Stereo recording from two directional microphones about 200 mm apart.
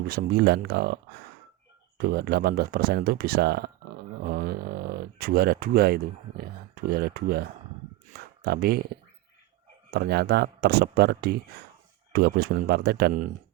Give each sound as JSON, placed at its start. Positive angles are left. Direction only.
{"t": 0.1, "sound": "speech", "side_deg": -50}
{"t": 2.0, "sound": "speech", "side_deg": -50}